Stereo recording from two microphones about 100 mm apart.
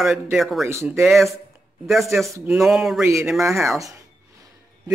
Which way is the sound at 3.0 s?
30° right (ahead or behind).